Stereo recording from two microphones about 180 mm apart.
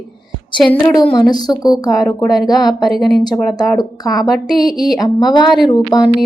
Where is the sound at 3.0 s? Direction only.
Centre (ahead or behind).